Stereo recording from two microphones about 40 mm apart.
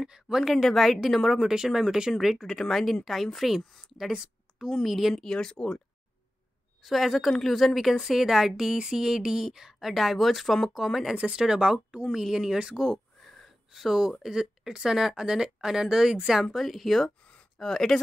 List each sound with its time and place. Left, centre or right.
0.0 s speech: centre
0.7 s speech: centre
1.5 s speech: centre
4.1 s a sound: centre
4.8 s speech: centre
5.1 s speech: centre
6.8 s speech: centre
11.3 s speech: centre
12.7 s a sound: centre
13.7 s speech: centre
16.5 s speech: centre
17.2 s a sound: left
17.6 s speech: centre